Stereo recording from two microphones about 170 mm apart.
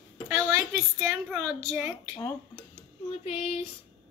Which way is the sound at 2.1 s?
20° left (ahead or behind).